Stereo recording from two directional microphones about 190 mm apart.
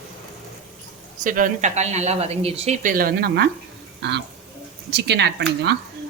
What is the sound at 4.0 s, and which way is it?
Speech, 60° right (ahead or behind).